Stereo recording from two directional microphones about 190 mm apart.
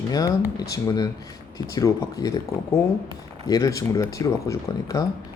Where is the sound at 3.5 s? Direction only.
20° left (ahead or behind).